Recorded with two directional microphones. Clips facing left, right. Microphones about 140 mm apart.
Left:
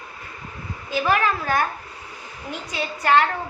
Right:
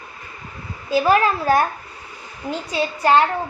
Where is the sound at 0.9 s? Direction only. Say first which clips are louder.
Right 5 dB; 35° right (ahead or behind).